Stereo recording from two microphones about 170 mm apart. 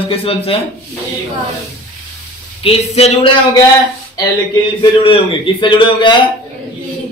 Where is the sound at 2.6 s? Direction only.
35° left (ahead or behind).